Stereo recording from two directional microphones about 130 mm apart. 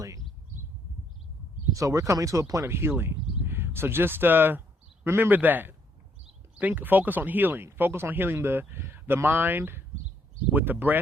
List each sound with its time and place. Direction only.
1.7 s speech: 25° right (ahead or behind)